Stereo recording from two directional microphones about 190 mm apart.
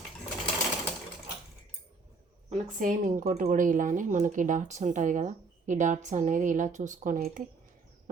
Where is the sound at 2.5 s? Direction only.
40° right (ahead or behind).